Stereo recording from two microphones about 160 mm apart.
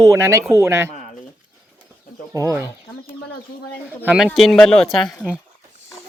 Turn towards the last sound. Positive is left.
turn(degrees=5)  # may be behind; listen again after turning